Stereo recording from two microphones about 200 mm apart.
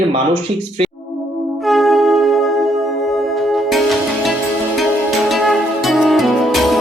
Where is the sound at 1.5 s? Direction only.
Centre (ahead or behind).